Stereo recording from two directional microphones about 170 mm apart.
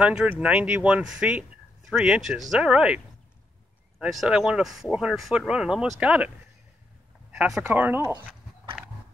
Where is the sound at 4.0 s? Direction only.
5° right (ahead or behind).